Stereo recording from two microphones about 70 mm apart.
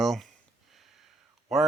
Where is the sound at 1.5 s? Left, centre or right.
Centre.